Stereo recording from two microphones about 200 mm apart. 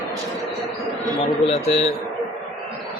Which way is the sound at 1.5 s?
30° left (ahead or behind).